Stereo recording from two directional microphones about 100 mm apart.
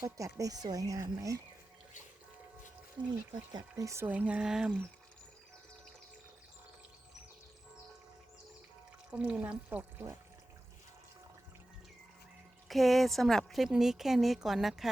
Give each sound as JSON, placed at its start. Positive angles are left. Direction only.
{"t": 0.2, "sound": "speech", "side_deg": -35}
{"t": 3.0, "sound": "speech", "side_deg": -45}
{"t": 3.6, "sound": "speech", "side_deg": -30}
{"t": 4.0, "sound": "speech", "side_deg": -15}
{"t": 9.0, "sound": "speech", "side_deg": -10}
{"t": 12.6, "sound": "a woman's voice", "side_deg": 0}